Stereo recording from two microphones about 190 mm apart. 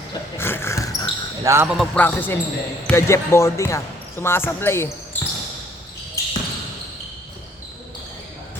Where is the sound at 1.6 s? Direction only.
Centre (ahead or behind).